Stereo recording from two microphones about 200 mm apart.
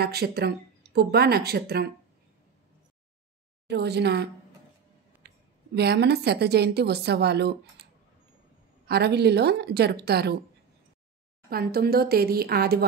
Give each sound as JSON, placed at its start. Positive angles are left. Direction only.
{"t": 0.0, "sound": "speech", "side_deg": -50}
{"t": 3.6, "sound": "a woman's voice", "side_deg": -55}
{"t": 5.8, "sound": "a woman's voice", "side_deg": -55}
{"t": 11.4, "sound": "speech", "side_deg": -50}